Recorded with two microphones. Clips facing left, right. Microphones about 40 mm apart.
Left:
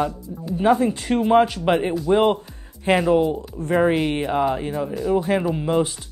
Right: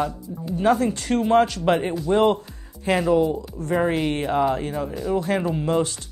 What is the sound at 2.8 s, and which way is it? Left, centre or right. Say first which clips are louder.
Speech: left 2 dB; left.